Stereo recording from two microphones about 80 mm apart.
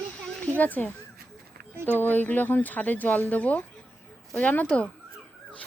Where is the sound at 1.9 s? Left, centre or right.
Left.